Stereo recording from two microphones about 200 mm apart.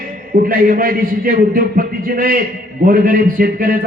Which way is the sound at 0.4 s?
45° right (ahead or behind).